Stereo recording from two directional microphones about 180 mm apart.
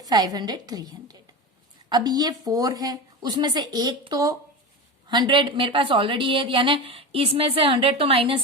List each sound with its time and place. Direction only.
0.0 s a woman's voice: 20° right (ahead or behind)